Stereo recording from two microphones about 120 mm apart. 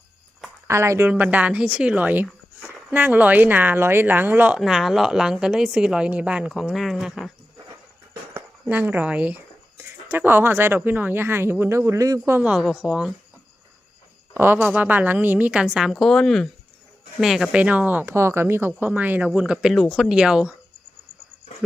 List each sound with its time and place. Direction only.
0.7 s speech: 25° right (ahead or behind); by 7.3 s 5° right (ahead or behind)
8.3 s speech: 15° right (ahead or behind)
12.4 s speech: 10° right (ahead or behind)
14.3 s speech: 20° right (ahead or behind)